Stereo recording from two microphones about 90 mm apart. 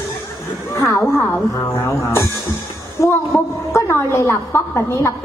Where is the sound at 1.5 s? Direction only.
30° left (ahead or behind).